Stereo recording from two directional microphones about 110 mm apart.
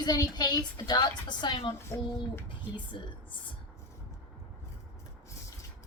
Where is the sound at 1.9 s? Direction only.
20° left (ahead or behind).